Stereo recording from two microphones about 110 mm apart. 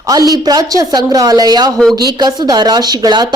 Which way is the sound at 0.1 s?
35° right (ahead or behind).